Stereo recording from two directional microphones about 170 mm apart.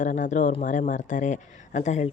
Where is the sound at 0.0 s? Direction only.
45° left (ahead or behind).